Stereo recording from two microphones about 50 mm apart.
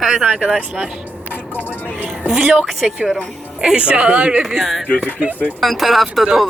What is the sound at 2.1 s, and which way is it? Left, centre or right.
Music, centre.